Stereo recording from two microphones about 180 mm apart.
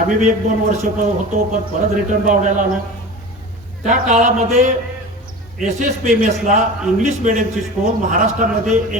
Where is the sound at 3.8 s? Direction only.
45° right (ahead or behind).